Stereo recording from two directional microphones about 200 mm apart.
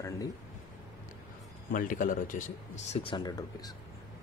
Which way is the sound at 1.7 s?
40° left (ahead or behind).